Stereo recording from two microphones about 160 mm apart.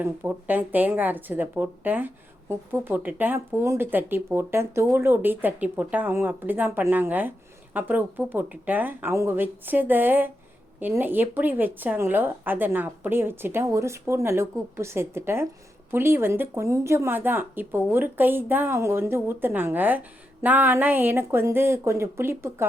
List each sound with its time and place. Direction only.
0.0 s speech: 10° right (ahead or behind)